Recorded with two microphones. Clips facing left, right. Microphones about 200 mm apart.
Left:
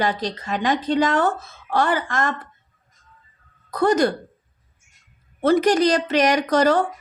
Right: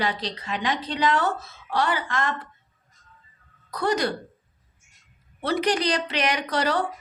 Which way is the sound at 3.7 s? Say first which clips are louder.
Left 6 dB; 50° left (ahead or behind).